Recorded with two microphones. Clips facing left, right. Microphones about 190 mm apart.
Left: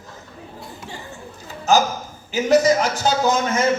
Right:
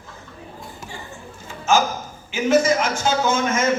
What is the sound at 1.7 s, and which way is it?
A man's voice, 40° left (ahead or behind).